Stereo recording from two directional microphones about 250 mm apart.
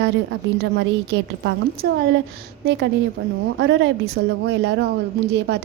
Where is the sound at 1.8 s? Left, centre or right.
Right.